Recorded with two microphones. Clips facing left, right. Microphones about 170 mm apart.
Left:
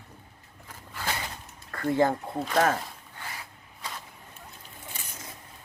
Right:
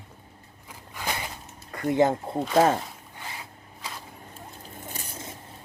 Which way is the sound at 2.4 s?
5° right (ahead or behind).